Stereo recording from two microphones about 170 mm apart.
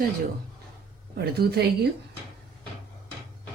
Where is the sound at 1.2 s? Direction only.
70° right (ahead or behind).